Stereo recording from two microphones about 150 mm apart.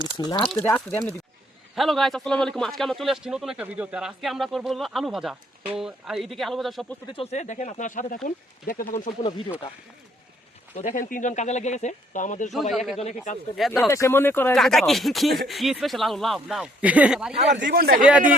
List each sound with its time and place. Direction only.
0.2 s speech: 30° left (ahead or behind)
0.5 s speech: 15° left (ahead or behind)
1.7 s a man's voice: centre (ahead or behind)
7.1 s speech: 40° left (ahead or behind); by 9.1 s 65° left (ahead or behind)
10.8 s speech: 55° left (ahead or behind)
12.7 s a man's voice: centre (ahead or behind)
13.7 s speech: 20° left (ahead or behind)
14.5 s a man's voice: centre (ahead or behind)
17.3 s speech: 45° right (ahead or behind)
17.7 s a man's voice: 80° right
18.0 s speech: 10° right (ahead or behind)